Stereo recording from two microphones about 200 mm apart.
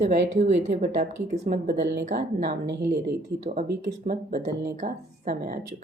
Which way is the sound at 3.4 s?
35° right (ahead or behind).